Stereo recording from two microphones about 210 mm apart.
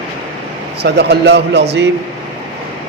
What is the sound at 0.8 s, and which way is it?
A man's voice, 55° right (ahead or behind).